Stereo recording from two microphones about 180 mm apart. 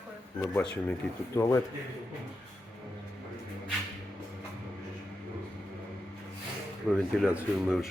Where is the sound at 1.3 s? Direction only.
15° left (ahead or behind).